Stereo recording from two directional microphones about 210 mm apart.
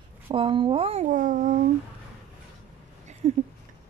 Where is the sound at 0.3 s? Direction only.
25° right (ahead or behind).